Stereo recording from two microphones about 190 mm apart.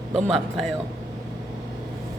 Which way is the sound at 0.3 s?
Centre (ahead or behind).